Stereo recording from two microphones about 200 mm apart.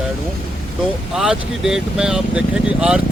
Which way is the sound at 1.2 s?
5° right (ahead or behind).